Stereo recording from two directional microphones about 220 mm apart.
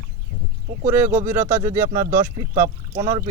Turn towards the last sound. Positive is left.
turn(degrees=-15)  # may be behind; listen again after turning